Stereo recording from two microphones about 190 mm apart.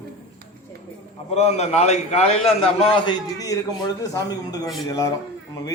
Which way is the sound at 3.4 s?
20° left (ahead or behind).